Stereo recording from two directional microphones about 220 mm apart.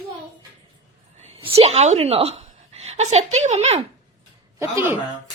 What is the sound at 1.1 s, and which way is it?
A woman's voice, 30° right (ahead or behind).